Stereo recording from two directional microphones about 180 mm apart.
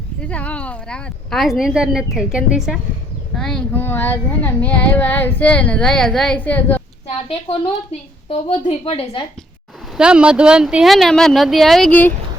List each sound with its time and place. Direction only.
0.2 s speech: 5° left (ahead or behind)
8.3 s a woman's voice: 35° left (ahead or behind)
10.0 s speech: 5° right (ahead or behind)